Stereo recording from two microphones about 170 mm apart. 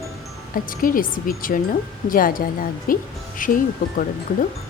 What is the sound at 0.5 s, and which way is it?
Speech, 55° left (ahead or behind).